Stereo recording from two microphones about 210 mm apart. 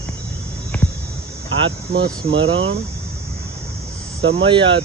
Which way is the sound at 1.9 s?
60° right (ahead or behind).